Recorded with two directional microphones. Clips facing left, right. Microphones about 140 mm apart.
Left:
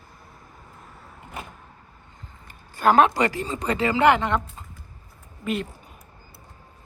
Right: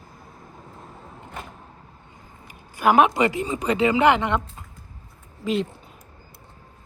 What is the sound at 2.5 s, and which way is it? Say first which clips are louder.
Speech: even; 15° right (ahead or behind).